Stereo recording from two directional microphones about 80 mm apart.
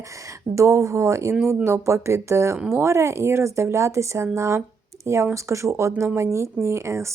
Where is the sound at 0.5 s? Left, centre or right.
Right.